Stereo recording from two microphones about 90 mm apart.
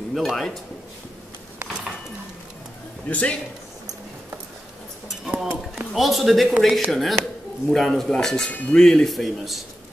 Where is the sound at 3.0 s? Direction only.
15° left (ahead or behind).